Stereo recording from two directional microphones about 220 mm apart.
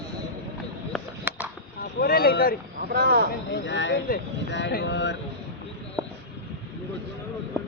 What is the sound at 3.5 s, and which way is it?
Speech, 55° left (ahead or behind).